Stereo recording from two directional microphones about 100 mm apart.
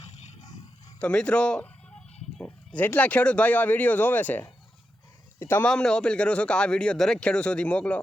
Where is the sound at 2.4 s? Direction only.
5° left (ahead or behind).